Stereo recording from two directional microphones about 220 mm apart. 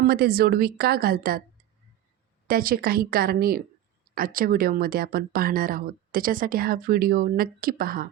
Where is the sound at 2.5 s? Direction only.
40° right (ahead or behind).